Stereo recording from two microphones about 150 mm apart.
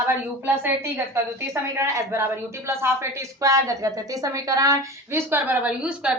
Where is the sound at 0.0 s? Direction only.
15° right (ahead or behind).